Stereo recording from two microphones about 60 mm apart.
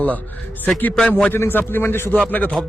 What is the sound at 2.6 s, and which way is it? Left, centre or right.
Speech, centre.